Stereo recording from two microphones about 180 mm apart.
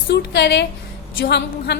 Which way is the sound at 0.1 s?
70° left (ahead or behind).